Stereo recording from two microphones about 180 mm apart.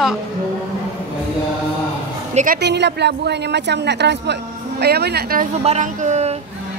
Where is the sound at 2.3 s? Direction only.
50° right (ahead or behind).